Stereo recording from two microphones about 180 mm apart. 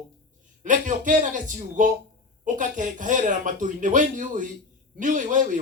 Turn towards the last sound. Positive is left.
turn(degrees=-45)  # may be behind; listen again after turning